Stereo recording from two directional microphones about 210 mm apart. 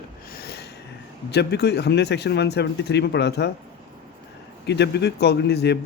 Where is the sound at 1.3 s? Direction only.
50° left (ahead or behind).